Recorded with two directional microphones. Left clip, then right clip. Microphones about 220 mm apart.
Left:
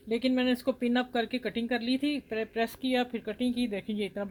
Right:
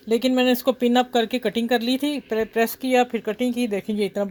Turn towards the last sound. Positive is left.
turn(degrees=-35)  # may be behind; listen again after turning